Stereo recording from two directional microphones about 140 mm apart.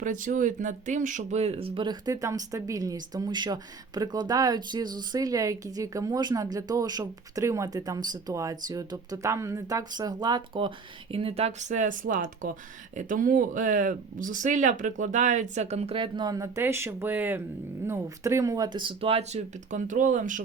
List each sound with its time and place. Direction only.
0.0 s speech: 65° right (ahead or behind); by 10.7 s 30° right (ahead or behind)
11.1 s speech: 45° right (ahead or behind); by 20.4 s 65° right (ahead or behind)